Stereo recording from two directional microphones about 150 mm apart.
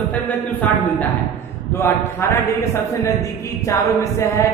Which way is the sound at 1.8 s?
15° left (ahead or behind).